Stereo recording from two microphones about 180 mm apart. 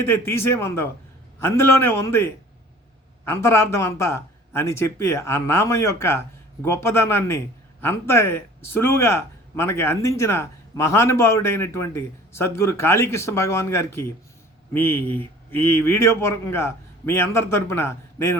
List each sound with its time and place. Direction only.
0.0 s a man's voice: 15° left (ahead or behind)